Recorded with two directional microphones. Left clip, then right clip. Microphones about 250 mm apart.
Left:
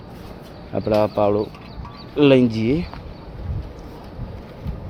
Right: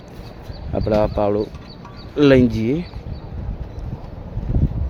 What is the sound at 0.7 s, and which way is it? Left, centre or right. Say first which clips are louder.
Speech: even; centre.